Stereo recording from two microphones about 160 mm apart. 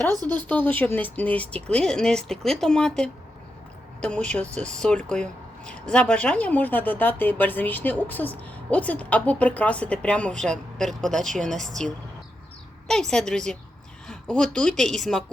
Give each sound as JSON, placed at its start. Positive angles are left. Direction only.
{"t": 0.1, "sound": "speech", "side_deg": -25}
{"t": 0.3, "sound": "speech", "side_deg": 10}
{"t": 12.9, "sound": "speech", "side_deg": 5}